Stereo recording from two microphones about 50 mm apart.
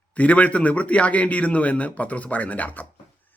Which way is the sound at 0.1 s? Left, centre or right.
Left.